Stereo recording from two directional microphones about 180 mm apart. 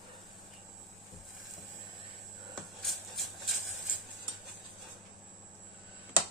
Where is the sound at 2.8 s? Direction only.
Centre (ahead or behind).